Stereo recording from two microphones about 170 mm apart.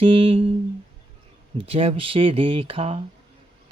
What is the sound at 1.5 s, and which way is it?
Speech, 35° right (ahead or behind).